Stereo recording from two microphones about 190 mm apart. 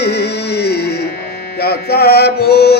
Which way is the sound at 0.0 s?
60° left (ahead or behind).